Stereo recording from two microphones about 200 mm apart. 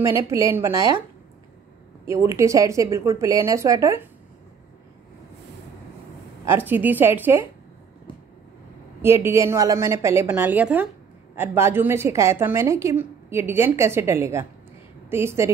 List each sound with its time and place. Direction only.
0.0 s a woman's voice: 15° right (ahead or behind)
2.0 s a woman's voice: 15° right (ahead or behind)
6.4 s a woman's voice: 10° right (ahead or behind)
9.0 s a woman's voice: 10° right (ahead or behind)